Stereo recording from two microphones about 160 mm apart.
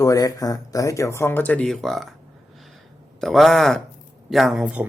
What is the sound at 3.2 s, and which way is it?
Speech, centre (ahead or behind).